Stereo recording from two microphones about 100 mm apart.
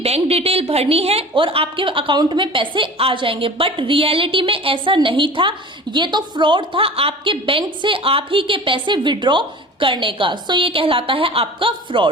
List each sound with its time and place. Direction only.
0.0 s a woman's voice: 90° right
1.4 s a woman's voice: 60° right (ahead or behind)